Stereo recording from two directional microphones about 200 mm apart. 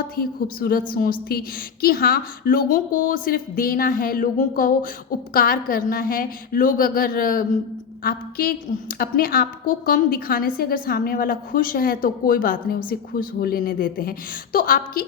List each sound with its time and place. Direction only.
0.2 s a woman's voice: 45° left (ahead or behind)